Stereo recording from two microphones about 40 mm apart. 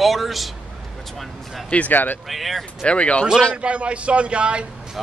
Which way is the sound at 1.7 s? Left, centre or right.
Left.